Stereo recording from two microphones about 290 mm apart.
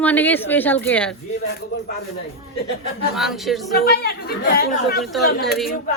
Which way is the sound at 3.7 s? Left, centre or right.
Left.